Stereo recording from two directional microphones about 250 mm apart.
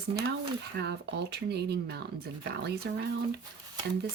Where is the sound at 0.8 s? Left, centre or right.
Right.